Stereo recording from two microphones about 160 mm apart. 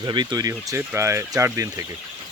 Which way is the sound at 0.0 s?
25° right (ahead or behind).